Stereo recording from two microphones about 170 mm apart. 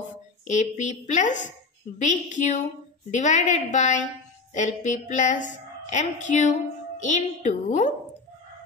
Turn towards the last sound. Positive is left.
turn(degrees=45)  # may be behind; listen again after turning